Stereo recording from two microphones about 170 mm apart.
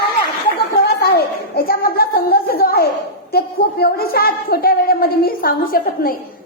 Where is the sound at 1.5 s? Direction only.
65° left (ahead or behind).